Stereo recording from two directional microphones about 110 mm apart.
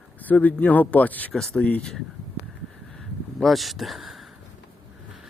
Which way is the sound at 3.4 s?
Centre (ahead or behind).